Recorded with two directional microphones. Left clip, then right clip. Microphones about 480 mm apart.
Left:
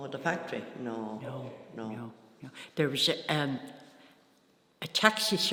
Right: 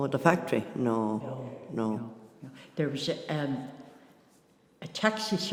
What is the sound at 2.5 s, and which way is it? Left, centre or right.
Speech, left.